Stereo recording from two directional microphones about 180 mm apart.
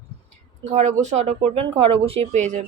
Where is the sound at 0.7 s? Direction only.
40° right (ahead or behind).